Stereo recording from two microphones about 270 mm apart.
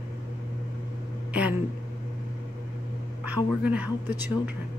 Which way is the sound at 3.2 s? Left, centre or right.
Centre.